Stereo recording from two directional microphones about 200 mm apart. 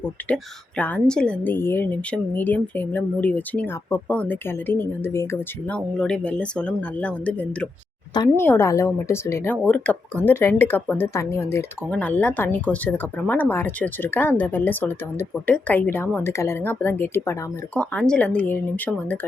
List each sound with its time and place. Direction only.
0.2 s speech: 10° left (ahead or behind)
8.1 s speech: 20° left (ahead or behind)